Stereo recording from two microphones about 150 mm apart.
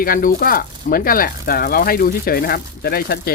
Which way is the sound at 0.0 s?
70° left (ahead or behind).